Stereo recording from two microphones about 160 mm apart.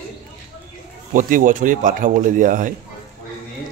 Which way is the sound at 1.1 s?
55° right (ahead or behind).